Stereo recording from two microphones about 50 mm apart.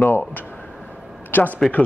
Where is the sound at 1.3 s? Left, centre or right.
Left.